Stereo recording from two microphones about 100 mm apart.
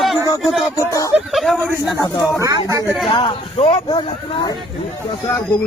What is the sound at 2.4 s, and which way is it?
Speech, 35° right (ahead or behind).